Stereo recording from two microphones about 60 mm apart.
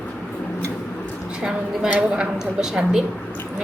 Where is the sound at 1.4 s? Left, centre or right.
Centre.